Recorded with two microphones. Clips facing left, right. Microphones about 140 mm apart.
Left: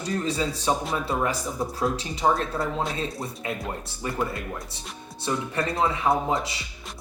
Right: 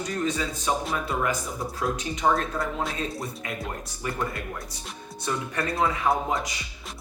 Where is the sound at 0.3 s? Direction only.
30° left (ahead or behind).